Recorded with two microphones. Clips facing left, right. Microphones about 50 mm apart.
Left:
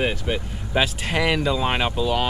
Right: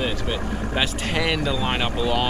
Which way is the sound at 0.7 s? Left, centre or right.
Centre.